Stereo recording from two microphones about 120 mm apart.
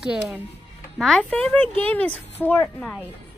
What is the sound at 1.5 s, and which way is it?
Speech, 15° left (ahead or behind).